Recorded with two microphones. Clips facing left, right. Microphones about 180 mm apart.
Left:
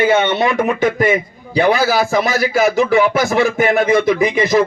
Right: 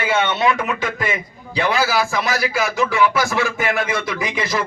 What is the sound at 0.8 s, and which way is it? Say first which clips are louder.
A man's voice: left 9 dB; 55° left (ahead or behind).